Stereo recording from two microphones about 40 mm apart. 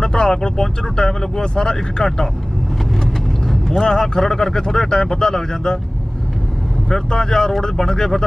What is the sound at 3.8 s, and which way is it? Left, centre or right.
Speech, centre.